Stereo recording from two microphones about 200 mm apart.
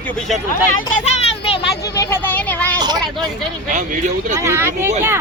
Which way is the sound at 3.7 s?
40° right (ahead or behind).